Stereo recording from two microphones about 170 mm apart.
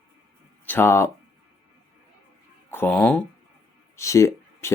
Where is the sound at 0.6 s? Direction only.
15° left (ahead or behind).